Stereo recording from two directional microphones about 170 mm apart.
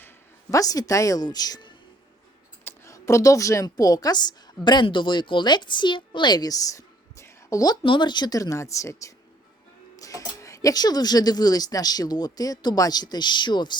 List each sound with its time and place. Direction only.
0.5 s a woman's voice: 20° left (ahead or behind)